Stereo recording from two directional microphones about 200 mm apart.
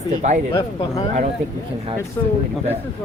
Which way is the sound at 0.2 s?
35° right (ahead or behind).